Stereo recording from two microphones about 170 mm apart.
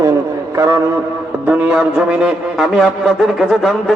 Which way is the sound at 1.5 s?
10° right (ahead or behind).